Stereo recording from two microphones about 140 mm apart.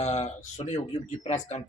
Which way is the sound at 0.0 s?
55° left (ahead or behind).